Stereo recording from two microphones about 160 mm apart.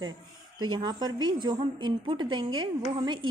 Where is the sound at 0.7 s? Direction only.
30° right (ahead or behind).